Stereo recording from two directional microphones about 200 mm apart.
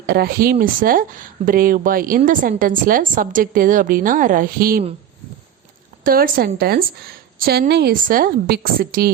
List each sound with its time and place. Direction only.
0.1 s speech: 50° right (ahead or behind)
6.1 s speech: 45° right (ahead or behind)